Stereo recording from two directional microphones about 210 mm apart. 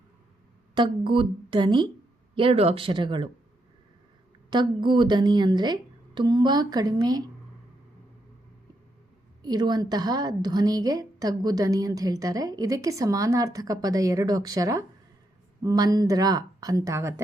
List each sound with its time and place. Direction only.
0.7 s a woman's voice: 25° right (ahead or behind)
4.4 s a woman's voice: 20° right (ahead or behind)
9.4 s a woman's voice: 20° right (ahead or behind)